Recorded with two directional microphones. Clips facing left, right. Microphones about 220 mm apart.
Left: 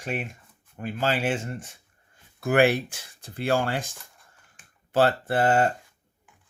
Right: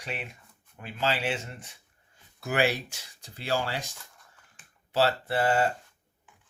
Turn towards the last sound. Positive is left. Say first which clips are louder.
# left 3 dB
turn(degrees=50)  # may be behind; listen again after turning